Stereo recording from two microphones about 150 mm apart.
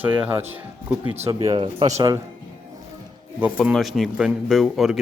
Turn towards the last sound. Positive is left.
turn(degrees=0)  # may be behind; listen again after turning